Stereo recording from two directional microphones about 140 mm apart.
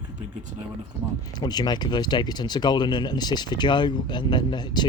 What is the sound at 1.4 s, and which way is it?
Speech, 30° left (ahead or behind).